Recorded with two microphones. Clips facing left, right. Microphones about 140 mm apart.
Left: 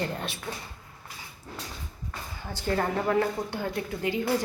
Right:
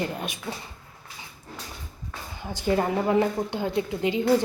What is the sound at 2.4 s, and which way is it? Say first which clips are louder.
A woman's voice: right 4 dB; 15° right (ahead or behind).